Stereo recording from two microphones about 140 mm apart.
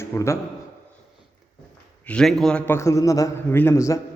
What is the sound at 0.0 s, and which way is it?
Speech, 20° left (ahead or behind).